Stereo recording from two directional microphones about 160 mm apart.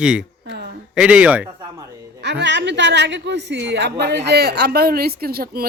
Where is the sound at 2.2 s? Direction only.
90° right.